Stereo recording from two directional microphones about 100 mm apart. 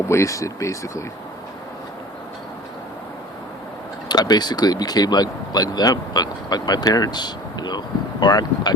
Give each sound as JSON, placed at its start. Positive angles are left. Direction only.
{"t": 0.1, "sound": "speech", "side_deg": 30}
{"t": 4.1, "sound": "speech", "side_deg": 45}